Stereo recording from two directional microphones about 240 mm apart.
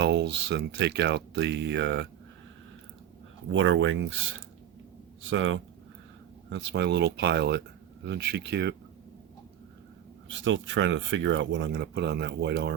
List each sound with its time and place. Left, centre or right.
0.0 s speech: right
3.5 s speech: right
10.2 s speech: right